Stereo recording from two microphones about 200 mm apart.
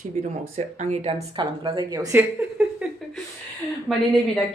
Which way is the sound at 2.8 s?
5° right (ahead or behind).